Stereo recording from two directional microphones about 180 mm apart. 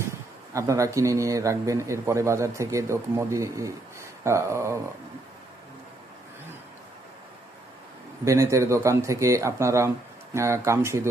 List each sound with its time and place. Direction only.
0.5 s a man's voice: 15° right (ahead or behind)
8.2 s a man's voice: 15° right (ahead or behind)